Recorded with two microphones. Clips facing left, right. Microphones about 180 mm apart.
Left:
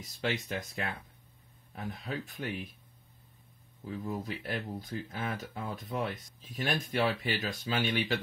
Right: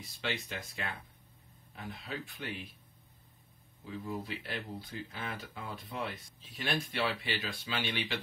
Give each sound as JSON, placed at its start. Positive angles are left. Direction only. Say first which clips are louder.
{"t": 0.0, "sound": "speech", "louder": "left 4 dB", "side_deg": 45}
{"t": 3.8, "sound": "speech", "louder": "left 3 dB", "side_deg": 45}